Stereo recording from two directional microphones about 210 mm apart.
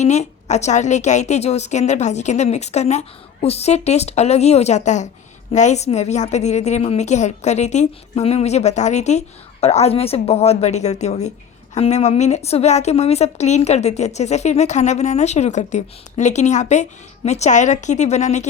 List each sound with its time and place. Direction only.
0.0 s a woman's voice: 35° left (ahead or behind)